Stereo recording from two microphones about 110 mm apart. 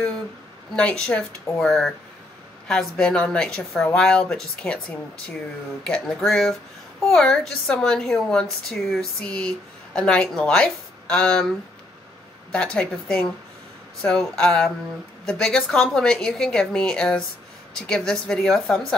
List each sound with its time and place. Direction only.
0.7 s a woman's voice: 10° left (ahead or behind)
12.5 s a woman's voice: 10° left (ahead or behind)